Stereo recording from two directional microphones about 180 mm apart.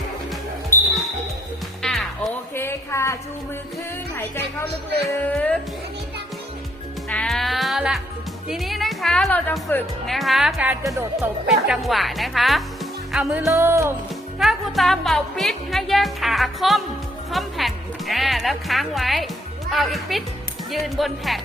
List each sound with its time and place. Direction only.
0.7 s music: 10° left (ahead or behind)
1.8 s music: centre (ahead or behind)
2.6 s a sound: 15° left (ahead or behind)
4.1 s speech: 10° left (ahead or behind)
7.1 s music: 5° left (ahead or behind)
8.4 s speech: centre (ahead or behind)
10.2 s speech: centre (ahead or behind)
13.5 s music: 15° right (ahead or behind)
14.3 s speech: centre (ahead or behind)